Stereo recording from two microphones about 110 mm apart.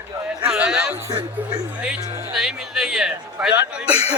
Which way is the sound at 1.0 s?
30° right (ahead or behind).